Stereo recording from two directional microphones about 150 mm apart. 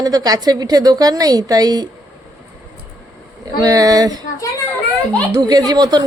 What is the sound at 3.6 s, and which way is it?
Speech, 25° right (ahead or behind).